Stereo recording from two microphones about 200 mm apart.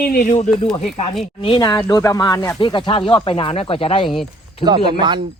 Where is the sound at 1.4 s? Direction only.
25° left (ahead or behind).